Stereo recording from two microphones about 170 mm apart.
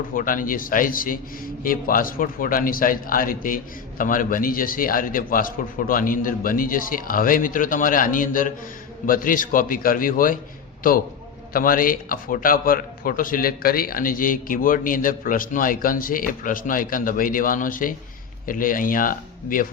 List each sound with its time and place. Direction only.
0.1 s a man's voice: 55° left (ahead or behind)
11.5 s a man's voice: 55° left (ahead or behind)